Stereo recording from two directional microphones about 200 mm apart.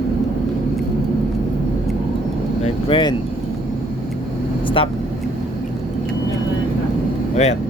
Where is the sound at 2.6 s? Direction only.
25° left (ahead or behind).